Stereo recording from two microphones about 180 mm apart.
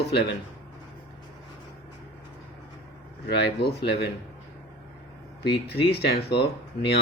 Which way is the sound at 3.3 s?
70° left (ahead or behind).